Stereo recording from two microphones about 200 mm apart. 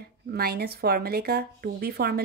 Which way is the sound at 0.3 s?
50° right (ahead or behind).